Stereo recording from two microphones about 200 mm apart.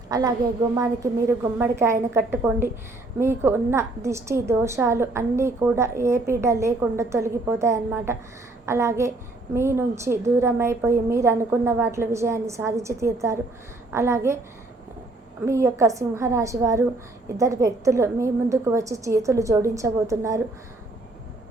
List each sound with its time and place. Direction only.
0.1 s a woman's voice: 20° right (ahead or behind)
15.4 s a woman's voice: 15° right (ahead or behind)